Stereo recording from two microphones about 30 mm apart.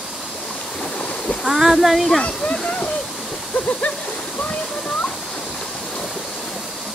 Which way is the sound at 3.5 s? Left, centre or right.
Left.